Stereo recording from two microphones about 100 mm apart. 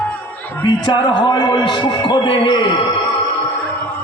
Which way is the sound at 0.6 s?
50° left (ahead or behind).